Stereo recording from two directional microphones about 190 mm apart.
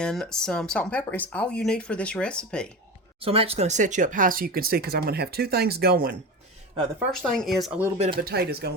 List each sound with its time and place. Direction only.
0.0 s speech: 5° left (ahead or behind)
3.2 s speech: 30° right (ahead or behind); by 6.1 s 50° right (ahead or behind)
7.2 s speech: centre (ahead or behind)
7.9 s speech: 35° right (ahead or behind)
8.2 s speech: 55° right (ahead or behind)